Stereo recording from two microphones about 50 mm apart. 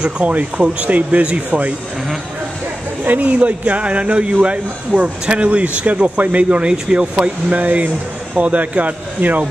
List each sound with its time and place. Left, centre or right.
0.2 s a man's voice: right
3.0 s a man's voice: right